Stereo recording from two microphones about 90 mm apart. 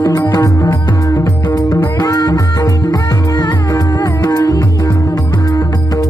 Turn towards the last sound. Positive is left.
turn(degrees=50)  # may be behind; listen again after turning